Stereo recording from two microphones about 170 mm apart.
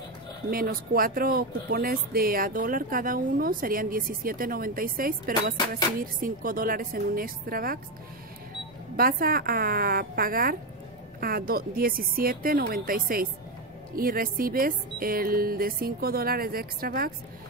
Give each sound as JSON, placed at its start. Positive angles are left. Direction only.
{"t": 0.5, "sound": "speech", "side_deg": -60}
{"t": 8.9, "sound": "speech", "side_deg": -60}